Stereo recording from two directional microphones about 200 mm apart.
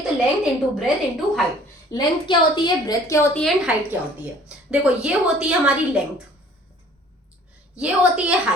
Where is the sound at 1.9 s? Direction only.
20° left (ahead or behind).